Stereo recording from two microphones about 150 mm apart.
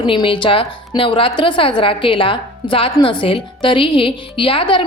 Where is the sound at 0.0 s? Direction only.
35° left (ahead or behind).